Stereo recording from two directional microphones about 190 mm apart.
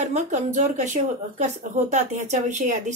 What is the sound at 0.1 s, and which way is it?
Speech, 40° right (ahead or behind).